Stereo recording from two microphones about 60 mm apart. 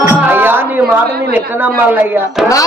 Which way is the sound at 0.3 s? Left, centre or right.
Right.